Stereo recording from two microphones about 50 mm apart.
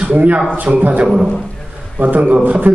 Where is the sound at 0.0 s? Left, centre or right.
Right.